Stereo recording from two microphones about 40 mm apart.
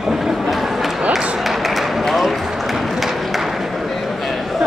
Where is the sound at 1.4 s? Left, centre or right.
Centre.